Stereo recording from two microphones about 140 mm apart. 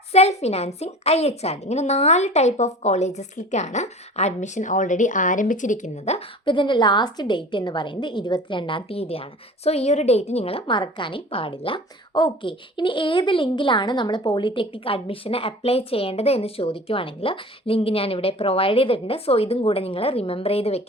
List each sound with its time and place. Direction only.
0.1 s a woman's voice: 50° left (ahead or behind)
6.1 s a woman's voice: 35° left (ahead or behind)